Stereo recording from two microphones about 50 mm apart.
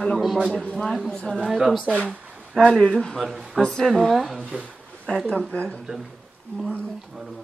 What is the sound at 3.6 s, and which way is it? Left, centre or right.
Speech, centre.